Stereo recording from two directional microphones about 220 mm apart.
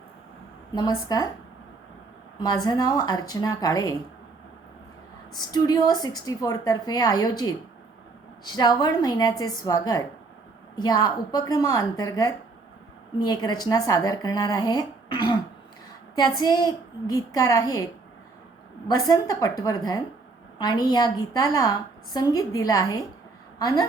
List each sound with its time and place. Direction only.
0.8 s a woman's voice: 20° left (ahead or behind)
2.4 s a woman's voice: 20° left (ahead or behind)
5.3 s a woman's voice: 20° left (ahead or behind)
16.4 s a woman's voice: 20° left (ahead or behind)
18.9 s a woman's voice: 15° left (ahead or behind)